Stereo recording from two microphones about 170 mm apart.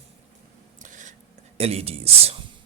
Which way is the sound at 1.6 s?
35° right (ahead or behind).